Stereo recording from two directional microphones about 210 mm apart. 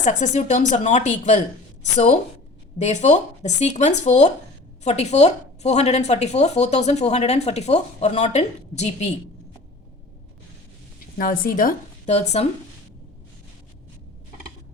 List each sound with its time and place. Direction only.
0.0 s a woman's voice: 35° left (ahead or behind)
2.7 s a woman's voice: 35° left (ahead or behind)
11.2 s a woman's voice: 40° left (ahead or behind)